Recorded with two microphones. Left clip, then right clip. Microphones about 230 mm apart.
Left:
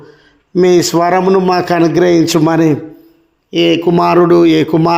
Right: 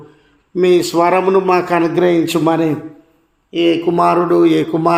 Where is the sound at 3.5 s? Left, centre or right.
Left.